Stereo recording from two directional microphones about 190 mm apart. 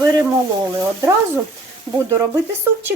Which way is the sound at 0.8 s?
15° right (ahead or behind).